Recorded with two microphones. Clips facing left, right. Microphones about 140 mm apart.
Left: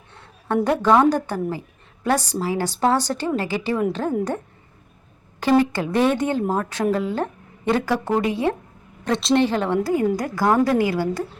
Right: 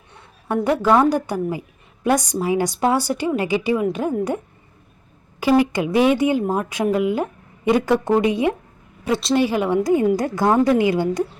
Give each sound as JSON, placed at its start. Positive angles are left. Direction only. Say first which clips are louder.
{"t": 0.1, "sound": "a woman's voice", "louder": "left 1 dB", "side_deg": -10}
{"t": 5.4, "sound": "speech", "louder": "right 1 dB", "side_deg": -10}
{"t": 9.0, "sound": "a woman's voice", "louder": "even", "side_deg": -5}